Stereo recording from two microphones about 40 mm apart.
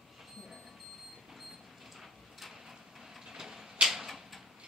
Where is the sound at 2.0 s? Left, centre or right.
Centre.